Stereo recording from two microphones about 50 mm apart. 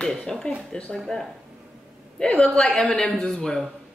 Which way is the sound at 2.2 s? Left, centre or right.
Centre.